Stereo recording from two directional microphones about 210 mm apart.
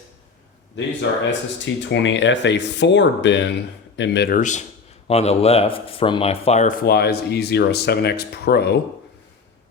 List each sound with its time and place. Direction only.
1.3 s speech: 60° left (ahead or behind)
4.4 s a man's voice: 35° left (ahead or behind)
6.8 s speech: 50° left (ahead or behind)